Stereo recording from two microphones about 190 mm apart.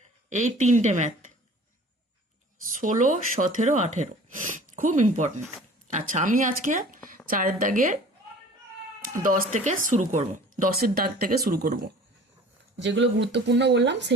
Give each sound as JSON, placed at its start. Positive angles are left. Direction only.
{"t": 0.3, "sound": "speech", "side_deg": -40}
{"t": 2.8, "sound": "speech", "side_deg": -45}
{"t": 9.1, "sound": "speech", "side_deg": -45}
{"t": 12.8, "sound": "speech", "side_deg": -70}